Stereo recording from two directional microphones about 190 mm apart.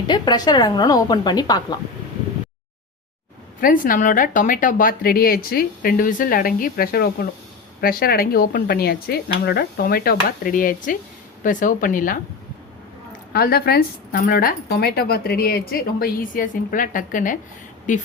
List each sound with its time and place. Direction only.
0.1 s a woman's voice: 20° left (ahead or behind)
3.6 s a woman's voice: 45° left (ahead or behind)
13.3 s a woman's voice: 55° left (ahead or behind)